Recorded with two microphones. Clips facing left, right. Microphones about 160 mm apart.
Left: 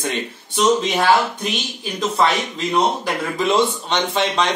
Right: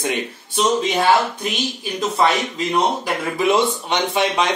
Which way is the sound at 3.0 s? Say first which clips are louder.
Right 1 dB; 10° right (ahead or behind).